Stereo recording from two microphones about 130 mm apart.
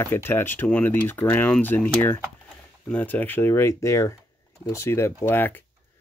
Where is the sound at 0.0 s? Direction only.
20° left (ahead or behind).